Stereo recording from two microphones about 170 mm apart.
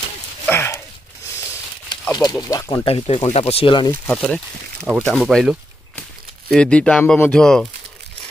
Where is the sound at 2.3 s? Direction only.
20° left (ahead or behind).